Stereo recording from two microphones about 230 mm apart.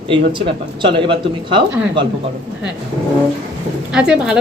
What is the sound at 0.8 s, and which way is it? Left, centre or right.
Speech, right.